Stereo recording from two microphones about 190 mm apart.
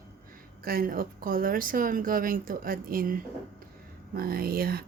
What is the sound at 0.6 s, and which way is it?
A woman's voice, 50° right (ahead or behind).